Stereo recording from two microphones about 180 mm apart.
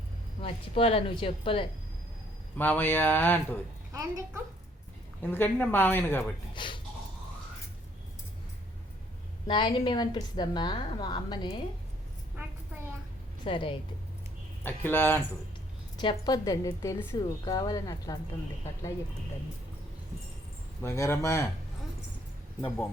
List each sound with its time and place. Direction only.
0.4 s speech: 35° left (ahead or behind)
2.6 s speech: 10° left (ahead or behind)
3.9 s a child's voice: 20° right (ahead or behind)
5.2 s speech: 10° left (ahead or behind)
6.5 s a woman's voice: 25° left (ahead or behind)
9.5 s a woman's voice: 25° left (ahead or behind)
13.4 s a woman's voice: 30° left (ahead or behind)
14.6 s speech: 10° left (ahead or behind)
16.0 s a woman's voice: 25° left (ahead or behind)
20.8 s speech: 15° left (ahead or behind)